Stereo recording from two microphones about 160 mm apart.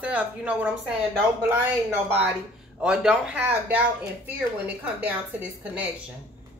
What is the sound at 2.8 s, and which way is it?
Speech, 5° right (ahead or behind).